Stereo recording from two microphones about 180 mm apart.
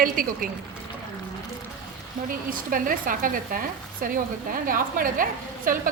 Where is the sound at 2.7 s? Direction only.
50° right (ahead or behind).